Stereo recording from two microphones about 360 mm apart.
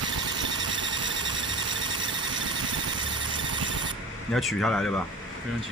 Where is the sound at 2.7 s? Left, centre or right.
Right.